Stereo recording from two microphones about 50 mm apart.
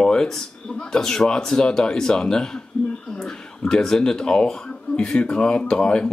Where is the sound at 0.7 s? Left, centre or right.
Centre.